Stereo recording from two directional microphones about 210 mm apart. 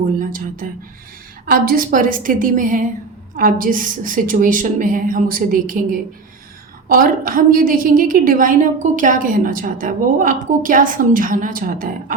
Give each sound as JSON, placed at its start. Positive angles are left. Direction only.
{"t": 0.2, "sound": "a woman's voice", "side_deg": -40}